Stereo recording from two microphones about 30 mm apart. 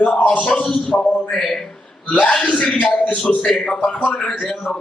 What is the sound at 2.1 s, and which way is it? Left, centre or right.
Speech, left.